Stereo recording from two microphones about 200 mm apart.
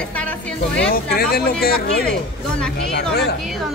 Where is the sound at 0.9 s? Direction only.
50° left (ahead or behind).